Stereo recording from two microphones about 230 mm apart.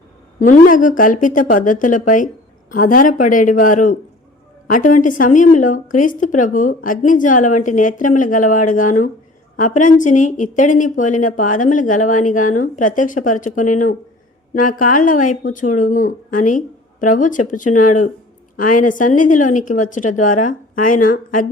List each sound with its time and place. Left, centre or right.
0.3 s a woman's voice: left